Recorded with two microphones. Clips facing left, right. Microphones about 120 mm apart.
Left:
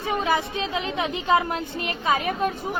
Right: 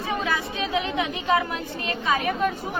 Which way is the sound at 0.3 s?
25° left (ahead or behind).